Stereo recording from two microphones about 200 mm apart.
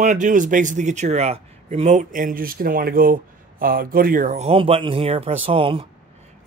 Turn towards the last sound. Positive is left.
turn(degrees=-25)  # may be behind; listen again after turning